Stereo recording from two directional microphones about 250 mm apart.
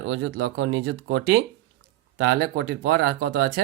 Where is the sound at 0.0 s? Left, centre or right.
Right.